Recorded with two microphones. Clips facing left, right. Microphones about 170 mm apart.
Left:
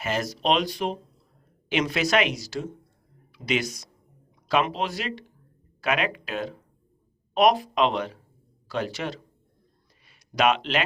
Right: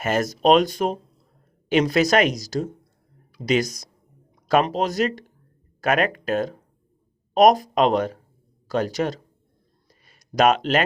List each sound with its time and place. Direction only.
0.0 s speech: 45° right (ahead or behind)